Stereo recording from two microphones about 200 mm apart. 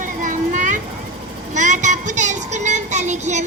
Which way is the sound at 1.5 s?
40° right (ahead or behind).